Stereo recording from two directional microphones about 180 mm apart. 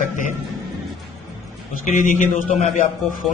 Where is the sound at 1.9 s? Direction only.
45° left (ahead or behind).